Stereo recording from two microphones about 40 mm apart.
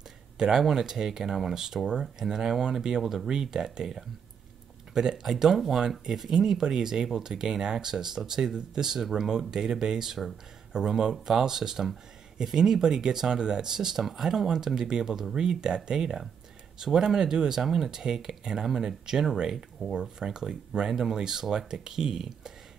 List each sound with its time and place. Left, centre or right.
0.4 s speech: centre
3.0 s speech: centre